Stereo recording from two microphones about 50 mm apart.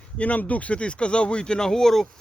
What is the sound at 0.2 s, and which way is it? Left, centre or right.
Speech, left.